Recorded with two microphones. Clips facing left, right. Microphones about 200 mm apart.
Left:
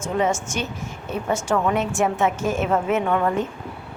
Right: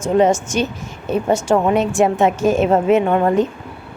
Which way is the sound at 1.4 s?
30° right (ahead or behind).